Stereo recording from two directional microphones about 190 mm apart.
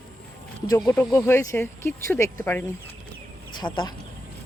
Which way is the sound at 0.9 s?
10° left (ahead or behind).